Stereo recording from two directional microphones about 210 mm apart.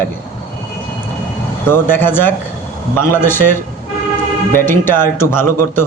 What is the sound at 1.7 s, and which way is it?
Speech, 10° left (ahead or behind).